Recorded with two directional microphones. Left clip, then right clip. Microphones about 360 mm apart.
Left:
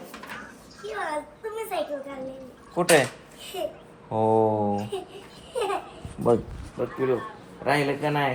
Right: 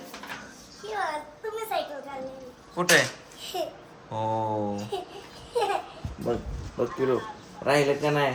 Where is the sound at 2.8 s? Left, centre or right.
Centre.